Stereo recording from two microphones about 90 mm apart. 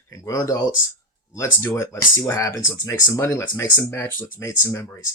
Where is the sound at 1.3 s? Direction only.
35° left (ahead or behind).